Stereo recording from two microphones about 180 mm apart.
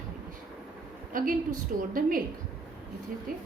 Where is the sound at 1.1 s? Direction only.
50° right (ahead or behind).